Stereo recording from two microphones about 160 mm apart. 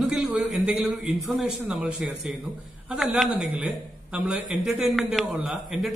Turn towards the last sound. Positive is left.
turn(degrees=0)  # may be behind; listen again after turning